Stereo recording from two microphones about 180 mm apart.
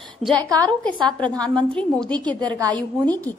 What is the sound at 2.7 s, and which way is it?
Speech, 10° left (ahead or behind).